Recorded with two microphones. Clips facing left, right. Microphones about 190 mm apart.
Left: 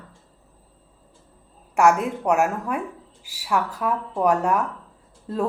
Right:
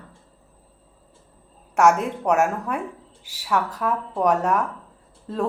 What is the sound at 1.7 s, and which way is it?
Speech, 5° left (ahead or behind).